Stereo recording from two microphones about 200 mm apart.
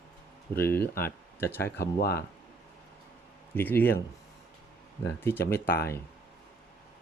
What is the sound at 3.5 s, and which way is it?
Speech, 10° left (ahead or behind).